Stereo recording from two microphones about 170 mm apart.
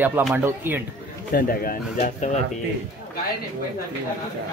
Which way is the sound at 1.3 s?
60° left (ahead or behind).